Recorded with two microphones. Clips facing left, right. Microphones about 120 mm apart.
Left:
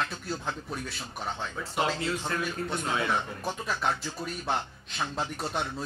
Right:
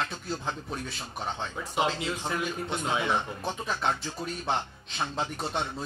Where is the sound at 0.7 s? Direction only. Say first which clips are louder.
Right 1 dB; 20° right (ahead or behind).